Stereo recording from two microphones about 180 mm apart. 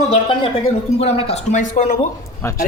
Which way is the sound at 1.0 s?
35° left (ahead or behind).